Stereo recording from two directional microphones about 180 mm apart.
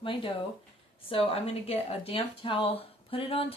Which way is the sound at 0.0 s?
30° left (ahead or behind).